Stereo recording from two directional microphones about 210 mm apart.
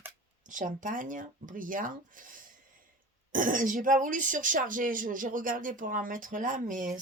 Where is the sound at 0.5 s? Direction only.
40° right (ahead or behind).